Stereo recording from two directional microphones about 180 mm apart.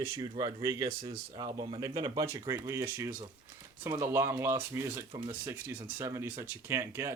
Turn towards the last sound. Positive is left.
turn(degrees=-15)  # may be behind; listen again after turning